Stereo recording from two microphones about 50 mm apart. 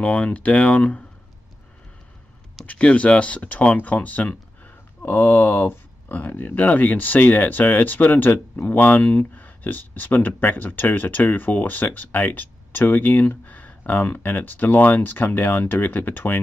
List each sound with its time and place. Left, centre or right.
0.0 s speech: left
2.6 s speech: left